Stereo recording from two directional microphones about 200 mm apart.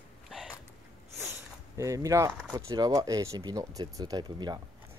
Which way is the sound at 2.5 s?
20° right (ahead or behind).